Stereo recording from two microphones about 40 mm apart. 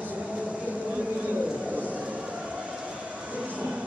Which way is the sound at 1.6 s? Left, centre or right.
Right.